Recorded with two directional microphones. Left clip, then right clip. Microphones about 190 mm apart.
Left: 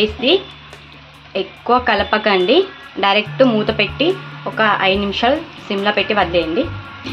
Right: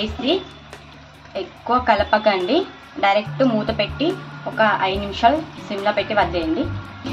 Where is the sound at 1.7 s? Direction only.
45° left (ahead or behind).